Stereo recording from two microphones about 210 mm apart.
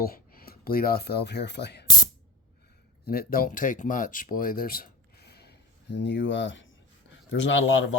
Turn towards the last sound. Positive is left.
turn(degrees=65)  # may be behind; listen again after turning